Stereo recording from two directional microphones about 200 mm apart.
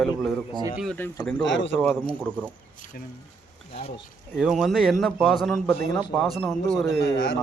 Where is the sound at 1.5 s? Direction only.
65° left (ahead or behind).